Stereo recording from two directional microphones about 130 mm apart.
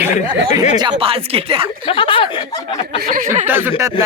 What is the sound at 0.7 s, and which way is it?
Speech, 40° right (ahead or behind).